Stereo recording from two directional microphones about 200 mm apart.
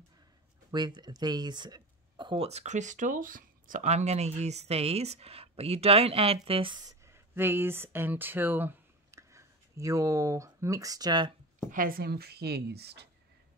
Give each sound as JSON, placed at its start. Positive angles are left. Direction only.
{"t": 0.7, "sound": "speech", "side_deg": -20}
{"t": 11.7, "sound": "a woman's voice", "side_deg": -45}